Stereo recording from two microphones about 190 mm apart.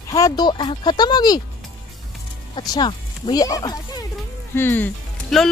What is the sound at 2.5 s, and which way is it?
Speech, 20° left (ahead or behind).